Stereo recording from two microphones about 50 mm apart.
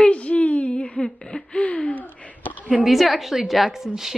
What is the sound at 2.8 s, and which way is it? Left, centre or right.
A woman's voice, centre.